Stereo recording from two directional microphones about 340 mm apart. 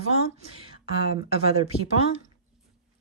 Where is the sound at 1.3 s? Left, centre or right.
Centre.